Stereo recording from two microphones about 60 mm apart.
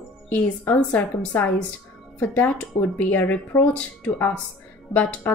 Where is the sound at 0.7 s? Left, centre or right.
Left.